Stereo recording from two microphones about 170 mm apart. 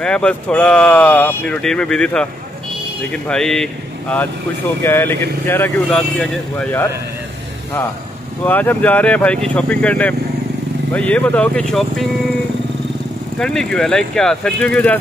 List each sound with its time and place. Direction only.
0.0 s speech: 5° left (ahead or behind)
8.5 s speech: 10° left (ahead or behind)
13.4 s speech: 5° left (ahead or behind)